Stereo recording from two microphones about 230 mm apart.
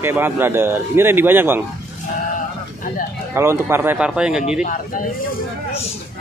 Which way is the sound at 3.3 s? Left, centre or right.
Centre.